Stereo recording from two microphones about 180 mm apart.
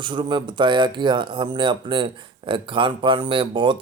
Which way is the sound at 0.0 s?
25° right (ahead or behind).